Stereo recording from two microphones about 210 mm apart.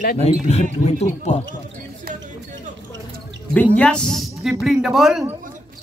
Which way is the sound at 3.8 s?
5° left (ahead or behind).